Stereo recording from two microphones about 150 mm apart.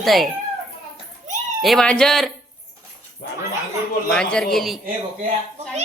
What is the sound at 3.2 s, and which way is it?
Speech, 90° left.